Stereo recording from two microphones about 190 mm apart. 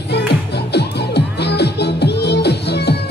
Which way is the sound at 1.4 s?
60° left (ahead or behind).